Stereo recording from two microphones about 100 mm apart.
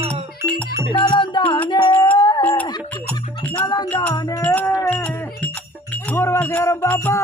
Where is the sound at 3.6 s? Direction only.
45° left (ahead or behind).